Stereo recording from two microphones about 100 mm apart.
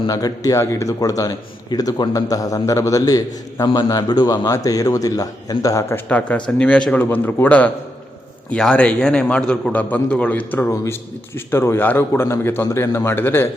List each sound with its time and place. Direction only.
0.1 s a man's voice: 40° left (ahead or behind)
6.1 s a man's voice: 15° left (ahead or behind)